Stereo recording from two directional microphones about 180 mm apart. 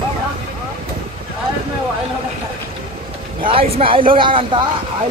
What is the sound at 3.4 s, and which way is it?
Speech, 30° right (ahead or behind).